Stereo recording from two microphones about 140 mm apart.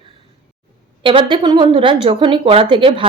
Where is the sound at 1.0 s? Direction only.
35° right (ahead or behind).